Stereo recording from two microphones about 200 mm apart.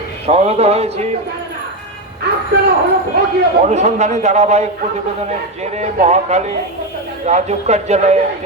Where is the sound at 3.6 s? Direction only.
35° right (ahead or behind).